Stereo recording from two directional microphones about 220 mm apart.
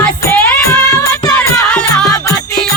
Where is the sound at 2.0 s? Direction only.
15° left (ahead or behind).